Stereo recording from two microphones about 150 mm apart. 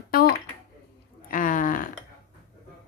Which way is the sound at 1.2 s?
65° left (ahead or behind).